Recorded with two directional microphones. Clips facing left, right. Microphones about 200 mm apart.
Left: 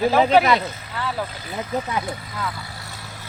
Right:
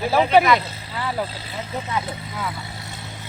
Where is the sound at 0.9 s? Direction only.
10° right (ahead or behind).